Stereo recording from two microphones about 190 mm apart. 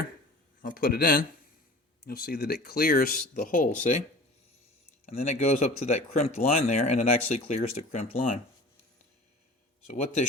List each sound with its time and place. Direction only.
0.6 s speech: 50° left (ahead or behind)
5.0 s speech: 35° left (ahead or behind)
9.9 s speech: 35° left (ahead or behind)